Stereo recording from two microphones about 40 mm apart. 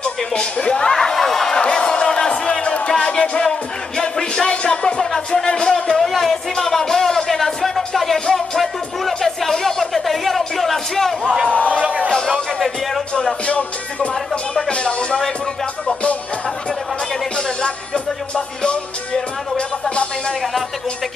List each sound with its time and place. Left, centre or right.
0.0 s speech: left
0.9 s a sound: centre
1.6 s music: left
2.5 s music: left
5.9 s speech: centre
6.6 s music: centre
8.5 s speech: centre
11.4 s music: left
11.7 s speech: right
12.3 s speech: centre
13.5 s music: left
17.4 s music: left